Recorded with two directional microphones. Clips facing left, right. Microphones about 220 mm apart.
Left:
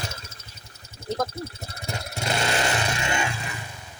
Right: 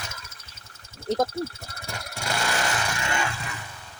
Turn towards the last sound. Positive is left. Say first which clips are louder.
# left 2 dB
turn(degrees=15)  # may be behind; listen again after turning